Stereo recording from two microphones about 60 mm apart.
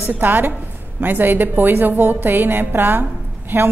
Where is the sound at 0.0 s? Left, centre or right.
Right.